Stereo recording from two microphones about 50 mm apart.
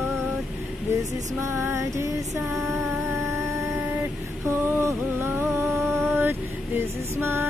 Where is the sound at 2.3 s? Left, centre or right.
Right.